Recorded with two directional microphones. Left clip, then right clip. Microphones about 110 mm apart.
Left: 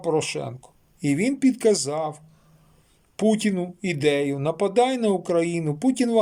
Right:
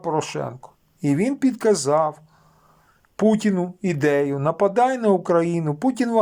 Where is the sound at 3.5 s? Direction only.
30° left (ahead or behind).